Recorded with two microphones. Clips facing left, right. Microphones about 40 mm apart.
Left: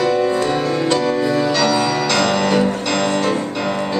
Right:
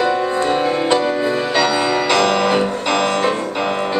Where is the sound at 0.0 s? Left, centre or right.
Centre.